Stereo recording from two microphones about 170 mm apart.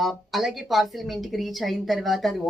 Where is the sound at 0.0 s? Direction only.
Centre (ahead or behind).